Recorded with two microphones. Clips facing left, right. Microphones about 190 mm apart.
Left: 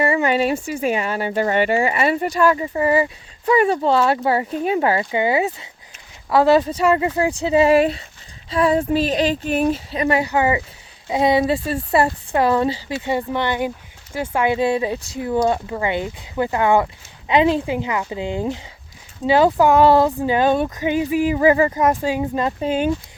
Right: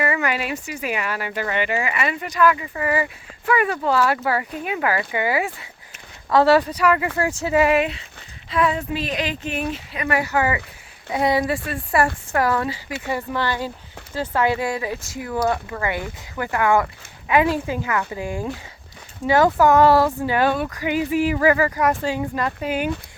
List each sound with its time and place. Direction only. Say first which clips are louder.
0.0 s speech: left 5 dB; 30° left (ahead or behind)